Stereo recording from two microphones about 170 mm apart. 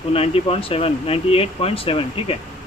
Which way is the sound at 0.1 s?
35° left (ahead or behind).